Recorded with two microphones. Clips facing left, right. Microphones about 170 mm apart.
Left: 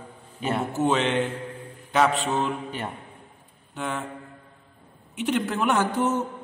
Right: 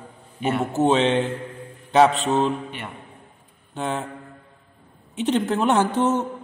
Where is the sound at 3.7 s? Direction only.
30° right (ahead or behind).